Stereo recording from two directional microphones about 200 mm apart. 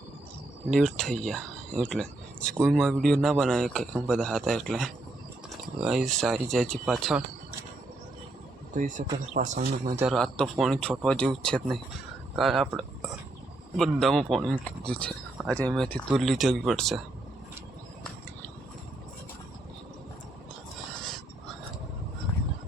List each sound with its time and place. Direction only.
0.7 s speech: 5° left (ahead or behind)
8.7 s speech: 40° right (ahead or behind)
9.8 s a man's voice: 15° right (ahead or behind)
10.1 s speech: centre (ahead or behind)